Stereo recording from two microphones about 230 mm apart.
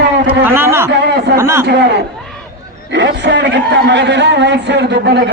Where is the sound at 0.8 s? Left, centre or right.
Right.